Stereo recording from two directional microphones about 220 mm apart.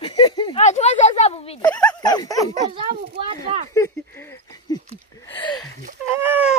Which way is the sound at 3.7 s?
10° left (ahead or behind).